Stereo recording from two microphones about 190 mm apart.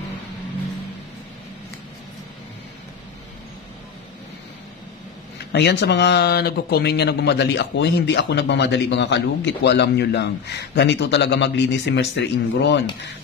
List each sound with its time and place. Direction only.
5.5 s speech: 65° left (ahead or behind)